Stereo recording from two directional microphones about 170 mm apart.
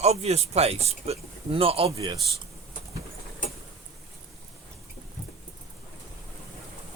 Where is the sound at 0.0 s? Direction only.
40° right (ahead or behind).